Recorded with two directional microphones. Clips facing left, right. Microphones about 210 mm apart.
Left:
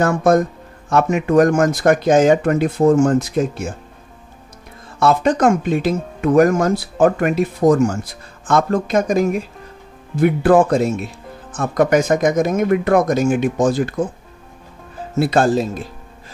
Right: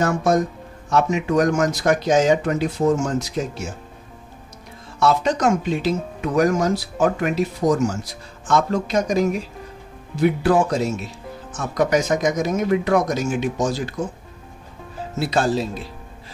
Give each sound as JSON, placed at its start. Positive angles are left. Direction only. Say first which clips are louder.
{"t": 0.0, "sound": "speech", "louder": "left 4 dB", "side_deg": 55}
{"t": 4.9, "sound": "speech", "louder": "left 3 dB", "side_deg": 55}
{"t": 15.1, "sound": "speech", "louder": "left 5 dB", "side_deg": 55}